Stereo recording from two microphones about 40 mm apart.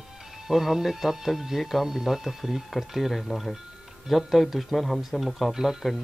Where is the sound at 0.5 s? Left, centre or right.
Centre.